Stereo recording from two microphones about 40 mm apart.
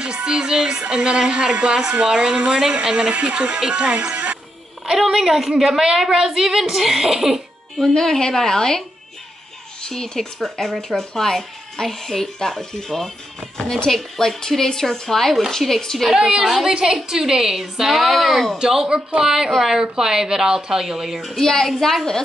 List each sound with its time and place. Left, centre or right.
0.0 s speech: right
4.1 s music: right
4.9 s a woman's voice: centre
7.9 s speech: centre
16.2 s a woman's voice: centre
18.6 s a woman's voice: centre
21.2 s a child's voice: centre